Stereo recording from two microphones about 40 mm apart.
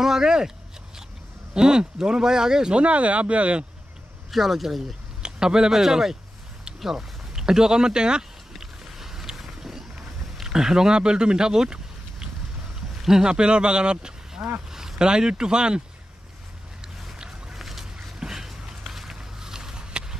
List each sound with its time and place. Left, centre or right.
0.0 s speech: centre
1.5 s speech: right
2.8 s speech: right
4.3 s speech: centre
5.2 s speech: centre
6.8 s a sound: centre
12.9 s speech: centre
17.6 s a sound: centre; by 20.2 s right